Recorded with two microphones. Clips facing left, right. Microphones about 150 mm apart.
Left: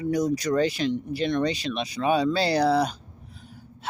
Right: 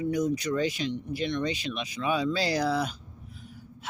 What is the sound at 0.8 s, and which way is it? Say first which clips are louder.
Speech: left 6 dB; 65° left (ahead or behind).